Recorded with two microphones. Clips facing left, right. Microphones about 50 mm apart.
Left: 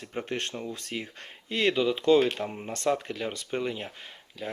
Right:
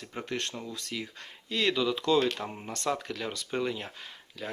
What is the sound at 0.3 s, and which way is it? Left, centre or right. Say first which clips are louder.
Speech: even; left.